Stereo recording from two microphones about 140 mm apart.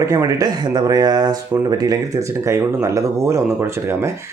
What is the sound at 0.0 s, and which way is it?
Speech, 20° right (ahead or behind).